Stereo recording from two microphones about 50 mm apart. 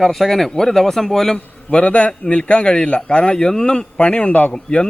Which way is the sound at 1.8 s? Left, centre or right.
Left.